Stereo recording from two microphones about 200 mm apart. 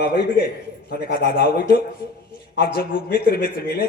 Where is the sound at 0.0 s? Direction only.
50° left (ahead or behind).